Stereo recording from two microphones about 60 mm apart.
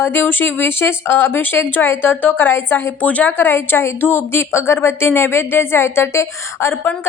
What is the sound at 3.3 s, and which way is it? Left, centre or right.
Speech, left.